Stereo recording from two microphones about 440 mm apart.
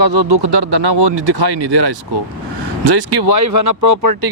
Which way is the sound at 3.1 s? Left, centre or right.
Right.